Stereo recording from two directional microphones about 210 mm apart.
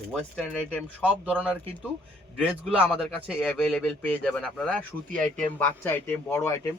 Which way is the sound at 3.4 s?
5° left (ahead or behind).